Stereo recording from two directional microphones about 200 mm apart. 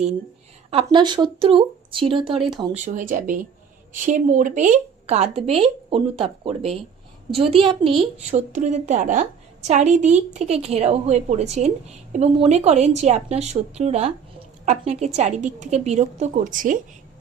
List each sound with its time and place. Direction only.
0.7 s speech: 25° right (ahead or behind)
2.7 s a woman's voice: 40° right (ahead or behind)
8.3 s a woman's voice: 35° right (ahead or behind)